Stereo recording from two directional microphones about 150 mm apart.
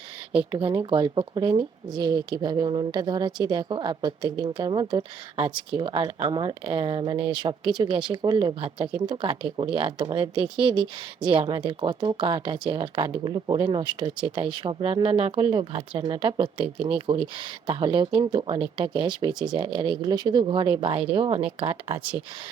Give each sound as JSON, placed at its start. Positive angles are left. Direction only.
{"t": 0.5, "sound": "speech", "side_deg": -30}